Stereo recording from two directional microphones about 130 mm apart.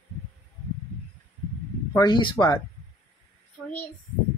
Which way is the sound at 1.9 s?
35° left (ahead or behind).